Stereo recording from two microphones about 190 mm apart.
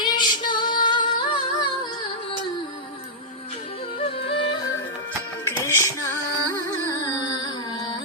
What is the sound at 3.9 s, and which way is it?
Music, 30° left (ahead or behind).